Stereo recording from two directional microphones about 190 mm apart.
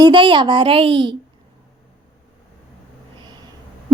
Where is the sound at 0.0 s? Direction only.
25° right (ahead or behind).